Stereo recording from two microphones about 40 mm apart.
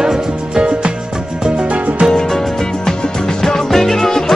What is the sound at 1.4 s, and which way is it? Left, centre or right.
Music, right.